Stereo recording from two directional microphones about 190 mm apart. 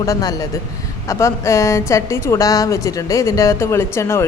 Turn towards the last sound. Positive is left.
turn(degrees=15)  # may be behind; listen again after turning